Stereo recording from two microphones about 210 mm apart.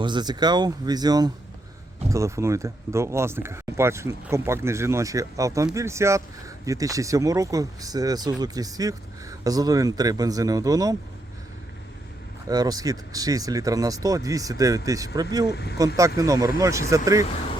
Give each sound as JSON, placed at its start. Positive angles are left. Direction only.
{"t": 0.0, "sound": "speech", "side_deg": -20}
{"t": 12.5, "sound": "speech", "side_deg": -20}
{"t": 15.4, "sound": "speech", "side_deg": 50}
{"t": 16.0, "sound": "speech", "side_deg": -15}